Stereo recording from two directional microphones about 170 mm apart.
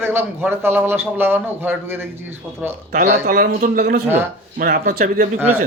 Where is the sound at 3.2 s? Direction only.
60° right (ahead or behind).